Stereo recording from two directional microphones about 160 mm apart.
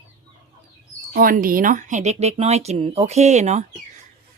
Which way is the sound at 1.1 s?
60° right (ahead or behind).